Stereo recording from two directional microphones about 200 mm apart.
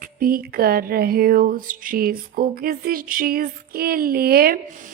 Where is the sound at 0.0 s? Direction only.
45° right (ahead or behind).